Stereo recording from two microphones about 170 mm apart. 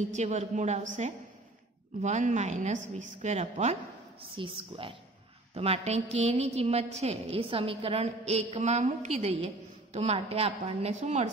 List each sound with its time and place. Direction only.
0.1 s a woman's voice: 45° right (ahead or behind)